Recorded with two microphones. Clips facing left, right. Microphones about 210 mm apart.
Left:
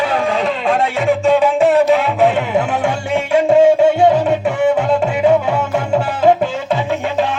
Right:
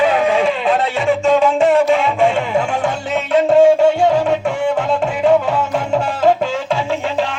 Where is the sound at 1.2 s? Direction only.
15° left (ahead or behind).